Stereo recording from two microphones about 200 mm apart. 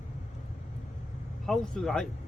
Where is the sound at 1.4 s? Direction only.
Centre (ahead or behind).